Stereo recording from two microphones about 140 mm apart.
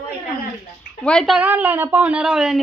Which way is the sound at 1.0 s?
5° left (ahead or behind).